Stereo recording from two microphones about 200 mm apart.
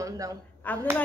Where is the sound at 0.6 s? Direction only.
10° left (ahead or behind).